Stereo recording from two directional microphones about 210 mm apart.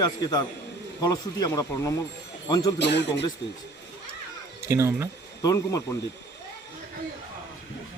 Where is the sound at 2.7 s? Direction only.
55° left (ahead or behind).